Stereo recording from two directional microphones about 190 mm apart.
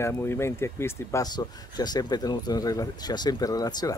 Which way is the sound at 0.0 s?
15° left (ahead or behind).